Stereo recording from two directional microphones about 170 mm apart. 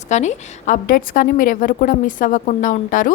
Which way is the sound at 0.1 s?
45° left (ahead or behind).